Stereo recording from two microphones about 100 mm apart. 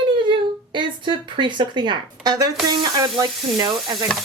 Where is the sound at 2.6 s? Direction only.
40° right (ahead or behind).